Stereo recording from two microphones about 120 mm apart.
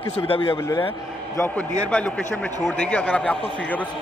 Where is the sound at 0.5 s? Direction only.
20° left (ahead or behind).